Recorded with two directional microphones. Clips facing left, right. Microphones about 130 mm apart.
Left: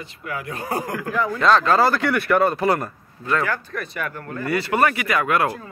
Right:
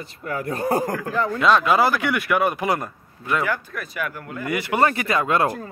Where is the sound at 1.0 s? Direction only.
30° right (ahead or behind).